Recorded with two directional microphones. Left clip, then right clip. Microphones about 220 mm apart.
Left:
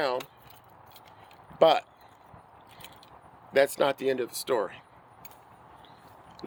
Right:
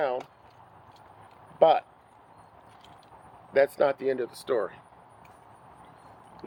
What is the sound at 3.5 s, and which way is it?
Speech, 45° left (ahead or behind).